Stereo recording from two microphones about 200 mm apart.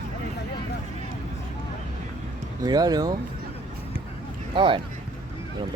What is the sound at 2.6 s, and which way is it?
Speech, 20° right (ahead or behind).